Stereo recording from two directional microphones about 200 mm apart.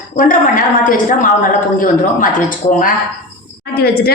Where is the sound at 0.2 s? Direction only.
40° left (ahead or behind).